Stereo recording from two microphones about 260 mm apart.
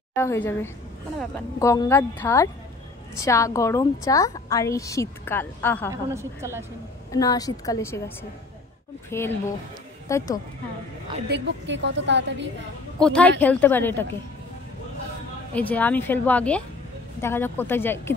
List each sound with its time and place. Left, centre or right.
0.1 s a woman's voice: centre
5.9 s a woman's voice: centre
7.1 s a woman's voice: centre
11.2 s a woman's voice: right
13.0 s a woman's voice: centre
15.7 s a woman's voice: centre